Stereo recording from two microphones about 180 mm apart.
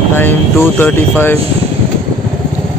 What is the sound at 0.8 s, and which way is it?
Speech, 10° left (ahead or behind).